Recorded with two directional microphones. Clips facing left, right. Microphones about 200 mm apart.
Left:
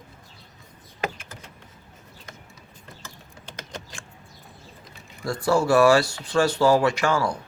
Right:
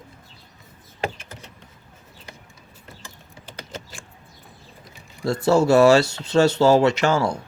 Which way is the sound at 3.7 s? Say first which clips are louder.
Right 2 dB; 5° right (ahead or behind).